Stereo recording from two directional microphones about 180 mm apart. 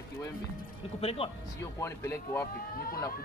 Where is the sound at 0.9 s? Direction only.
30° left (ahead or behind).